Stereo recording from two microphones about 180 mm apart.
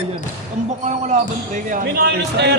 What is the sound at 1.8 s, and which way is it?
Speech, 65° right (ahead or behind).